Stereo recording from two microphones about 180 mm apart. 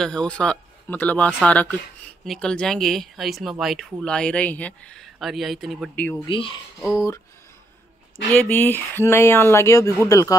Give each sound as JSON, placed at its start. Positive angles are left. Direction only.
{"t": 0.0, "sound": "speech", "side_deg": 5}
{"t": 6.2, "sound": "speech", "side_deg": 30}
{"t": 8.3, "sound": "speech", "side_deg": 10}